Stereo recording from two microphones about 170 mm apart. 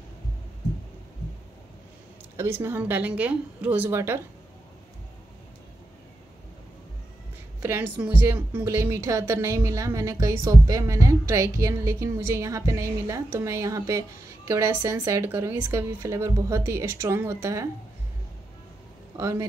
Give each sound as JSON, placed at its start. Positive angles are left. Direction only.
{"t": 2.3, "sound": "a woman's voice", "side_deg": -15}
{"t": 7.6, "sound": "a woman's voice", "side_deg": -10}
{"t": 19.1, "sound": "speech", "side_deg": -20}